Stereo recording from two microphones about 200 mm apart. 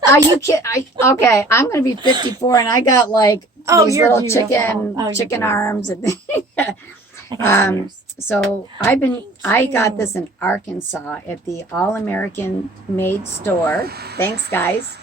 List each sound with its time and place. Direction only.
0.1 s a woman's voice: 15° left (ahead or behind)
2.1 s speech: 20° right (ahead or behind)
2.4 s a woman's voice: 20° left (ahead or behind)
3.7 s a woman's voice: 15° right (ahead or behind)
4.1 s a woman's voice: 15° left (ahead or behind)
13.8 s speech: 50° right (ahead or behind)
14.5 s a woman's voice: 10° left (ahead or behind)